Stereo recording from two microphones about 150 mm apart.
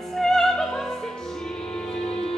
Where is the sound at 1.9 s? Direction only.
40° left (ahead or behind).